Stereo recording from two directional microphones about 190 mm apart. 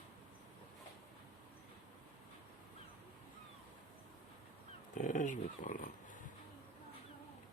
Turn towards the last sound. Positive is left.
turn(degrees=45)  # may be behind; listen again after turning